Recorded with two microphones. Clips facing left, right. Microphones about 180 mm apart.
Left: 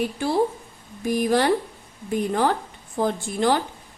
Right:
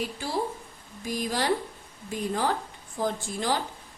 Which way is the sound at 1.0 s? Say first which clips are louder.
Left 8 dB; 60° left (ahead or behind).